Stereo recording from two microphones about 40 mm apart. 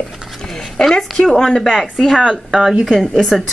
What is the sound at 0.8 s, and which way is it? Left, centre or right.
Speech, centre.